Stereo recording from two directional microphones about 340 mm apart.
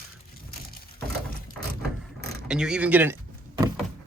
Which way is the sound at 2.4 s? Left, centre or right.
Centre.